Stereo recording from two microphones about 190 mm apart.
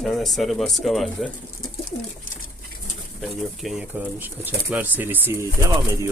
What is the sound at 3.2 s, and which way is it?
Speech, centre (ahead or behind).